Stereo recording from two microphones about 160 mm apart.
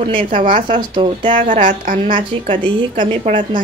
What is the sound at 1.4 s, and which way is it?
Speech, 50° right (ahead or behind).